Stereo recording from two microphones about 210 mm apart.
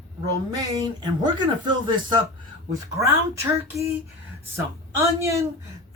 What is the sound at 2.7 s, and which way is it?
A woman's voice, 15° right (ahead or behind).